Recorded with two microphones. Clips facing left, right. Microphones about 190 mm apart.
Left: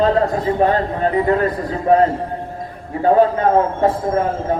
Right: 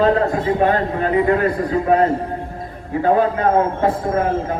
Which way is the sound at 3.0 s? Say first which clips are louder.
Left 3 dB; 30° left (ahead or behind).